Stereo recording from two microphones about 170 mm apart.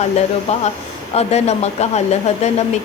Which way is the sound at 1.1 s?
40° left (ahead or behind).